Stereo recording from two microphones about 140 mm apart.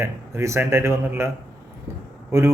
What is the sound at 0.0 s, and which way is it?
Speech, 20° right (ahead or behind).